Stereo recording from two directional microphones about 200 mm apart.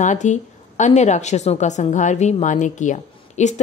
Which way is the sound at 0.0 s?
35° left (ahead or behind).